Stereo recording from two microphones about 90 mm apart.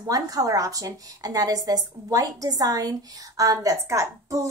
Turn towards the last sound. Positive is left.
turn(degrees=-35)  # may be behind; listen again after turning